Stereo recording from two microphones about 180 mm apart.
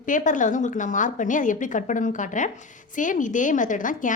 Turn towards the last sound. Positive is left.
turn(degrees=45)  # may be behind; listen again after turning